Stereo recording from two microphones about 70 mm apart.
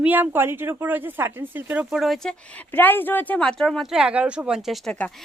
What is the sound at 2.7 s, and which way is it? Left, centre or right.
Speech, left.